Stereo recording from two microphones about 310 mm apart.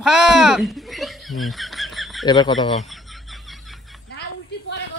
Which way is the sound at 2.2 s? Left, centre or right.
Centre.